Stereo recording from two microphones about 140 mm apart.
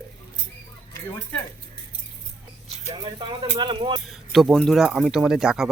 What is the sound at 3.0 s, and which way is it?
Speech, 35° right (ahead or behind).